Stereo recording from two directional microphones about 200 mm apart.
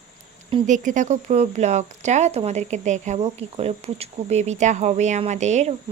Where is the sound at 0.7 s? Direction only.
40° right (ahead or behind).